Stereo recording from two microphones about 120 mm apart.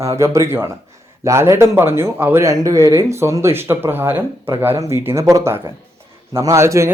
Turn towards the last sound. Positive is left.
turn(degrees=-25)  # may be behind; listen again after turning